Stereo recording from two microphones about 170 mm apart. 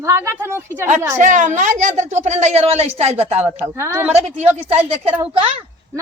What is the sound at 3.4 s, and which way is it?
Speech, 15° right (ahead or behind).